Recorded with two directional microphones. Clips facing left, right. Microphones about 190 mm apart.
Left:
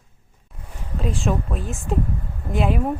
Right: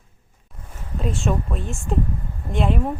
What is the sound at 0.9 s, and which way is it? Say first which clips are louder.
Speech: even; centre (ahead or behind).